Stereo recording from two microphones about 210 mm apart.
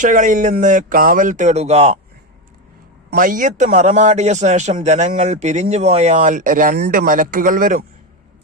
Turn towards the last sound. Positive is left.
turn(degrees=-40)  # may be behind; listen again after turning